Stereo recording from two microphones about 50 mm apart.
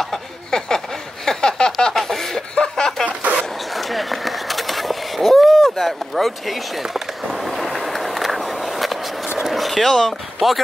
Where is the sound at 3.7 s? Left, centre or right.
Centre.